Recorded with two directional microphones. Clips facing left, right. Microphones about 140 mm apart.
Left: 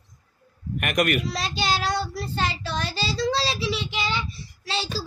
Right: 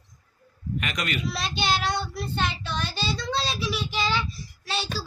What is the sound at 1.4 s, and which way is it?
Child singing, 35° left (ahead or behind).